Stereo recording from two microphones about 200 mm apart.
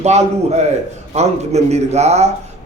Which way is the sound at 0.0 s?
35° right (ahead or behind).